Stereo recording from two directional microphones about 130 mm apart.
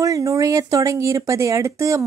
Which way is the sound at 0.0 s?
25° right (ahead or behind).